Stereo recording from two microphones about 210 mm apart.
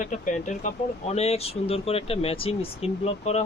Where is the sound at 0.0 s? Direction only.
35° left (ahead or behind).